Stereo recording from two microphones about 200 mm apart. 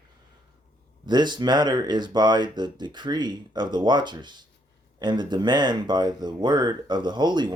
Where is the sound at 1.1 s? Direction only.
20° right (ahead or behind).